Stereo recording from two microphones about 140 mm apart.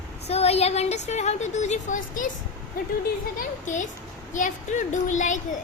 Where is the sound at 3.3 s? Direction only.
60° left (ahead or behind).